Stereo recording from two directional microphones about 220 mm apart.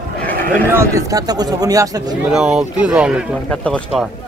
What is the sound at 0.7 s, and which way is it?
Speech, 15° right (ahead or behind).